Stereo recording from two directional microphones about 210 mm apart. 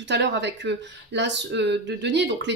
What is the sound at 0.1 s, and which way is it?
Speech, 55° right (ahead or behind).